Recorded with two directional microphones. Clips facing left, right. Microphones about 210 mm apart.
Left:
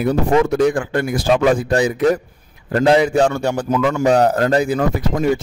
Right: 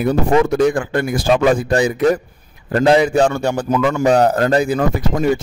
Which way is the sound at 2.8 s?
40° right (ahead or behind).